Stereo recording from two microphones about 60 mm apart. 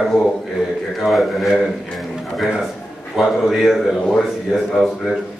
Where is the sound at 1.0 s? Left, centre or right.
Centre.